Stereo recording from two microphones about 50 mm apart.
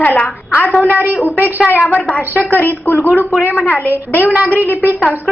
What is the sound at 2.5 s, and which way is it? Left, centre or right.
Speech, left.